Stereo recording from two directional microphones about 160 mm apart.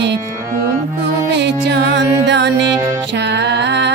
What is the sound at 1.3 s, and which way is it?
Music, 90° right.